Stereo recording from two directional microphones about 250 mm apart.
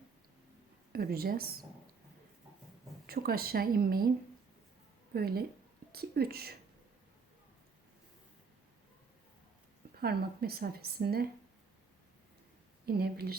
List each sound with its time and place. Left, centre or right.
0.9 s a woman's voice: right
3.1 s a woman's voice: right
5.1 s a woman's voice: right
10.0 s a woman's voice: right
12.8 s a woman's voice: right